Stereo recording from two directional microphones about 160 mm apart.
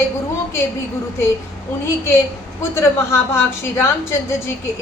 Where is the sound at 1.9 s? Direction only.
15° left (ahead or behind).